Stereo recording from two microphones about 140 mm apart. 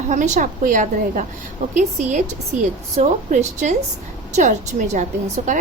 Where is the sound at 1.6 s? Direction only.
55° right (ahead or behind).